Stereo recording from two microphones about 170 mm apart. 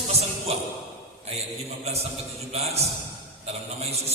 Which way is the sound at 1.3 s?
40° right (ahead or behind).